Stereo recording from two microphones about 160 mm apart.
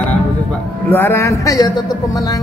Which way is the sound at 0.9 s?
15° left (ahead or behind).